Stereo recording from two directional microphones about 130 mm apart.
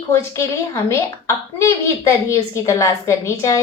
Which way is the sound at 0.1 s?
20° left (ahead or behind).